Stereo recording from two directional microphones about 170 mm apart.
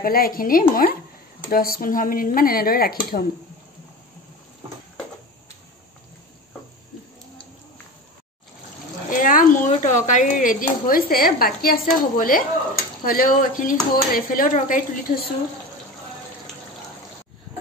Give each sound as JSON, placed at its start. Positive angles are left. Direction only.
{"t": 0.0, "sound": "speech", "side_deg": 55}
{"t": 9.1, "sound": "a woman's voice", "side_deg": 50}